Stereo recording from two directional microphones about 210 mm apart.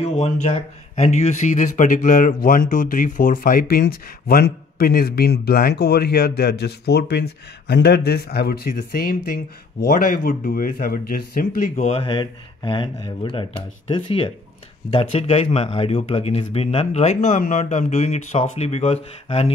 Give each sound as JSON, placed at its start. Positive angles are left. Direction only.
{"t": 0.1, "sound": "speech", "side_deg": 30}
{"t": 12.0, "sound": "speech", "side_deg": 25}